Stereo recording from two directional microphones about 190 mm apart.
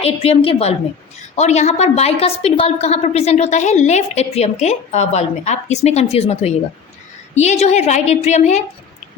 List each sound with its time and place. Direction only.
0.0 s a woman's voice: 30° left (ahead or behind)